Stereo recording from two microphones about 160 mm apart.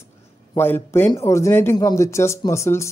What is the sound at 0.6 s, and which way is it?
Speech, 15° left (ahead or behind).